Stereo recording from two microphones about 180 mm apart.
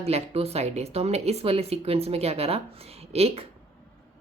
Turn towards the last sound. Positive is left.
turn(degrees=-35)  # may be behind; listen again after turning